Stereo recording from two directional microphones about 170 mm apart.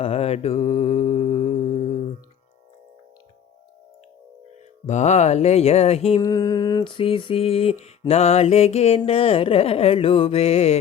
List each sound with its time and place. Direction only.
0.0 s mantra: 35° left (ahead or behind)
4.9 s mantra: 45° left (ahead or behind)
6.1 s mantra: 20° left (ahead or behind); by 10.8 s 40° left (ahead or behind)